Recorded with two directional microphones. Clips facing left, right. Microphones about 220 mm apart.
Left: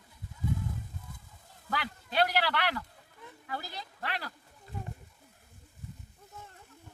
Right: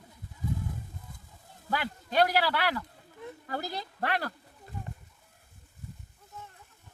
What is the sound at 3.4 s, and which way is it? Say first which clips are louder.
Speech: right 5 dB; 45° right (ahead or behind).